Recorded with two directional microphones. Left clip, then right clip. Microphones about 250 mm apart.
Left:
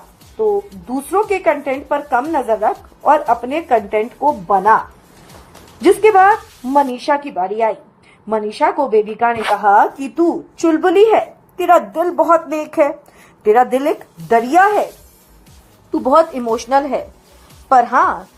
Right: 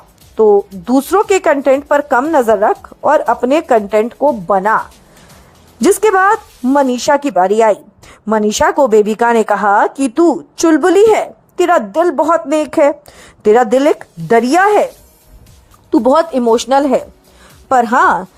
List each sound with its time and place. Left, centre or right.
0.9 s speech: right
5.8 s speech: right
15.9 s speech: right